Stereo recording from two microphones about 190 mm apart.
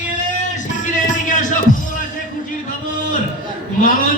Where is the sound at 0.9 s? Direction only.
40° left (ahead or behind).